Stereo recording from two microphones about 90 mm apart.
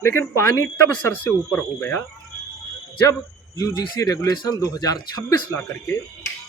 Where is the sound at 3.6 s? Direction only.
45° left (ahead or behind).